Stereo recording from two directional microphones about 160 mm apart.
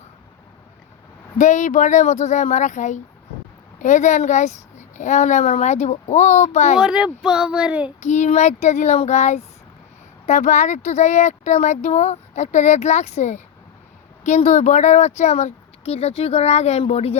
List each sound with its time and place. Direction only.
1.4 s speech: 50° left (ahead or behind)
6.7 s speech: 5° right (ahead or behind)
8.0 s speech: 50° left (ahead or behind)